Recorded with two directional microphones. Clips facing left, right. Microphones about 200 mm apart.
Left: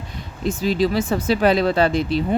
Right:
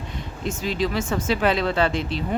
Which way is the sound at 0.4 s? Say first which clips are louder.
Left 6 dB; 35° left (ahead or behind).